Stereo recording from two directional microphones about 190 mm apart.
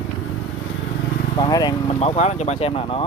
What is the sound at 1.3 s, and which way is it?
Speech, 20° left (ahead or behind).